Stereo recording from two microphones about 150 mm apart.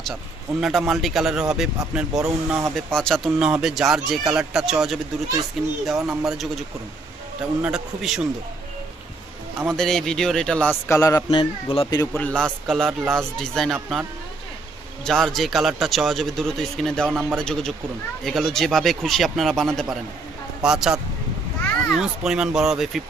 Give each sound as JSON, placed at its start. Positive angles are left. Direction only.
{"t": 0.6, "sound": "speech", "side_deg": 0}
{"t": 9.6, "sound": "speech", "side_deg": 5}
{"t": 10.8, "sound": "a man's voice", "side_deg": 20}
{"t": 11.3, "sound": "speech", "side_deg": 35}
{"t": 12.1, "sound": "speech", "side_deg": 5}
{"t": 15.0, "sound": "speech", "side_deg": 5}